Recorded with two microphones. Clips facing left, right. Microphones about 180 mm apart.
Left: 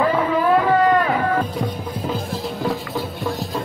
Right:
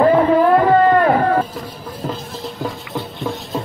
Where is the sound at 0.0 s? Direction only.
45° right (ahead or behind).